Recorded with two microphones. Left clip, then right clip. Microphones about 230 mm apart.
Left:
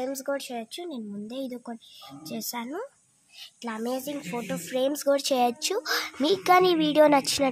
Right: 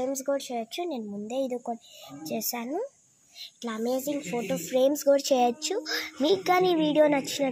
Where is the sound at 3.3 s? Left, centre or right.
Centre.